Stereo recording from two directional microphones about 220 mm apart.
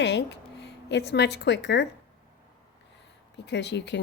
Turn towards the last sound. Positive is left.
turn(degrees=50)  # may be behind; listen again after turning